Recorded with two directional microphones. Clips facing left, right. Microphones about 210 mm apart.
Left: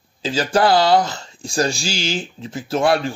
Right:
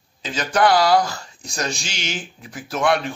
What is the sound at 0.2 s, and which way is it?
Speech, 30° left (ahead or behind).